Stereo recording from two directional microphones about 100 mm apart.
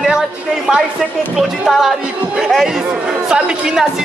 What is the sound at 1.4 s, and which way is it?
Speech, centre (ahead or behind).